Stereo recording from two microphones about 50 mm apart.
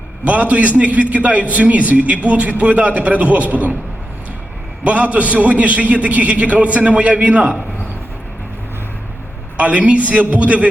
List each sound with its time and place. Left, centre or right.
0.3 s a man's voice: right
4.8 s a man's voice: right
9.6 s a man's voice: right